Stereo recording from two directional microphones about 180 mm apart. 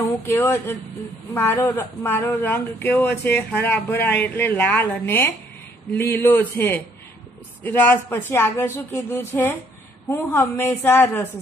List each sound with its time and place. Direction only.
0.3 s speech: 15° left (ahead or behind)